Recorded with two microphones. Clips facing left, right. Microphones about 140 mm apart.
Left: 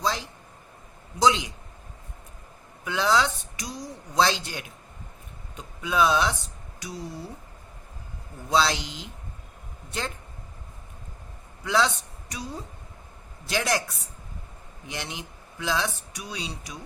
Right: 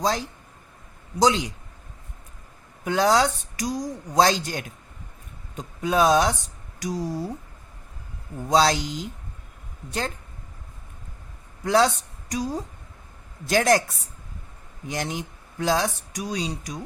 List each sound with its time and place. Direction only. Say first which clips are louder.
0.0 s speech: right 4 dB; 45° right (ahead or behind)
2.8 s speech: right 4 dB; 40° right (ahead or behind)
8.4 s speech: right 4 dB; 40° right (ahead or behind)
11.6 s a man's voice: right 4 dB; 40° right (ahead or behind)